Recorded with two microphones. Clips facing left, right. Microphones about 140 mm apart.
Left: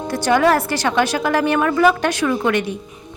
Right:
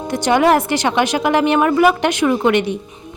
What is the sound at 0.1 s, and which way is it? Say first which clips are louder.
A woman's voice: right 2 dB; 20° right (ahead or behind).